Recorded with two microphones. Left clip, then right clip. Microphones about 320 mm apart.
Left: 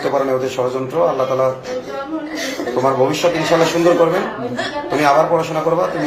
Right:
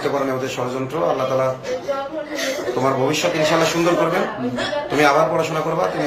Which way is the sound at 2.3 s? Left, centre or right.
Centre.